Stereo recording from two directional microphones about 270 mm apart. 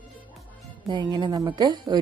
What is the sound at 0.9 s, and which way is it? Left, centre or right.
Speech, centre.